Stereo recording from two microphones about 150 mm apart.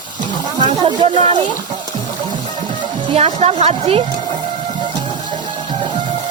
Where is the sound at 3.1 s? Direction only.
45° right (ahead or behind).